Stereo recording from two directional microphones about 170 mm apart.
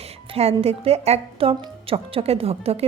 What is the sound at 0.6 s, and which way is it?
A woman's voice, 35° right (ahead or behind).